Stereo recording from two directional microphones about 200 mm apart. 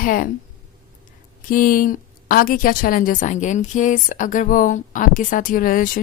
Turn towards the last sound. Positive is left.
turn(degrees=45)  # may be behind; listen again after turning